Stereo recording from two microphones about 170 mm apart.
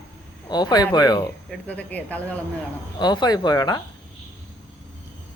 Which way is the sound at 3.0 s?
25° left (ahead or behind).